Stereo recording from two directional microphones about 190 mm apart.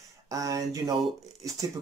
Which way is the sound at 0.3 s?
15° right (ahead or behind).